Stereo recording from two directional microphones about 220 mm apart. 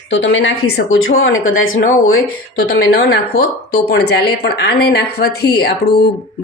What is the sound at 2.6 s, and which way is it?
A woman's voice, 45° left (ahead or behind).